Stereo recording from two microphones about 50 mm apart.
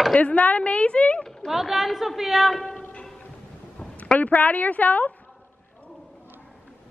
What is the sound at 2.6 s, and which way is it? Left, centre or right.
Music, centre.